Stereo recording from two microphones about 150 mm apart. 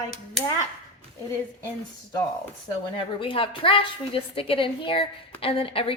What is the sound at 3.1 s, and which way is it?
A woman's voice, 35° left (ahead or behind).